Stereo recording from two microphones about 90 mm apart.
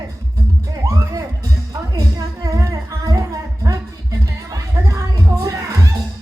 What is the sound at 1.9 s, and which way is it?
Singing, 40° right (ahead or behind).